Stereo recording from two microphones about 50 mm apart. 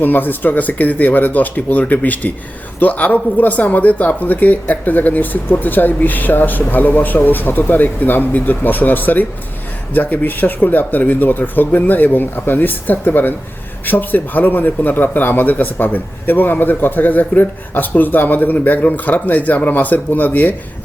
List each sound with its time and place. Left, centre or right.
0.0 s speech: left